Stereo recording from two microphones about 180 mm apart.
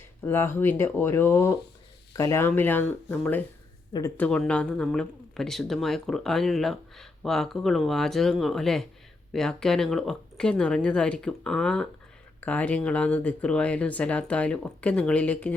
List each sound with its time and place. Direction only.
0.3 s speech: 10° left (ahead or behind)